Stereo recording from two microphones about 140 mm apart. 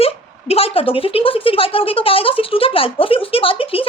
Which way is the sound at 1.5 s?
40° left (ahead or behind).